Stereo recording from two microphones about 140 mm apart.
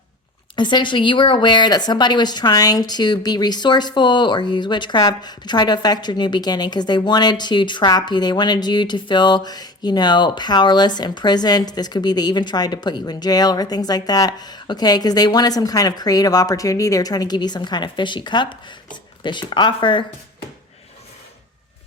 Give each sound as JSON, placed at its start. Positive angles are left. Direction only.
{"t": 0.5, "sound": "a woman's voice", "side_deg": 35}